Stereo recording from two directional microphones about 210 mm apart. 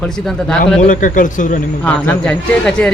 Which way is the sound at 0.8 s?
40° left (ahead or behind).